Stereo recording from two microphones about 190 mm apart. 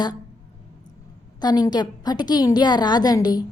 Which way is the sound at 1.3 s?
20° left (ahead or behind).